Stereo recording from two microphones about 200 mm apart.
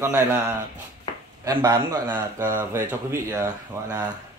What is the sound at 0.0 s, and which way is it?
Speech, 10° right (ahead or behind).